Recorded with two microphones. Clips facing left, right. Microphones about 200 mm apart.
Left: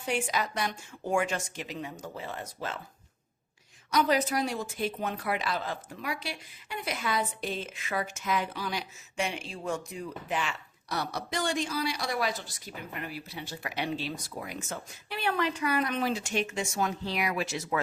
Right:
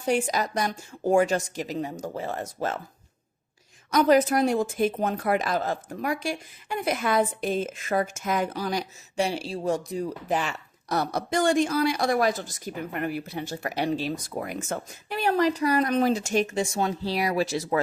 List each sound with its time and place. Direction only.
0.0 s a woman's voice: 40° right (ahead or behind)
3.9 s speech: 50° right (ahead or behind); by 17.7 s 35° right (ahead or behind)